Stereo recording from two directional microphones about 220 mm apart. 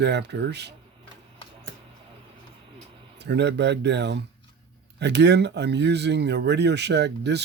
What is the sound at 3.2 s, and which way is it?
Speech, 50° right (ahead or behind).